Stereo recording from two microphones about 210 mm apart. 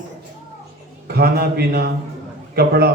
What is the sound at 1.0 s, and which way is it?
A man's voice, 45° right (ahead or behind).